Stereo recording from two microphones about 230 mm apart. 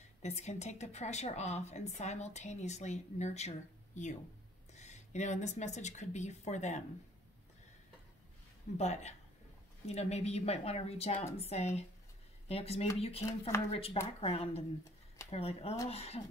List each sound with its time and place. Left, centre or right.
0.2 s a woman's voice: left
8.7 s a woman's voice: left